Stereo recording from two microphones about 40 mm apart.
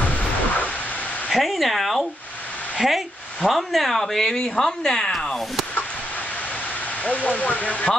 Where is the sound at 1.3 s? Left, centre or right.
Centre.